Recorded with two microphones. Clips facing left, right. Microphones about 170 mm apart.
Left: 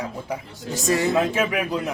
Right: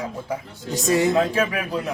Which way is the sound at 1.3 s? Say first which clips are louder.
Even; 20° left (ahead or behind).